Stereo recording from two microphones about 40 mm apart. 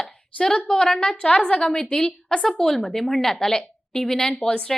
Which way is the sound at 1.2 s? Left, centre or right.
Left.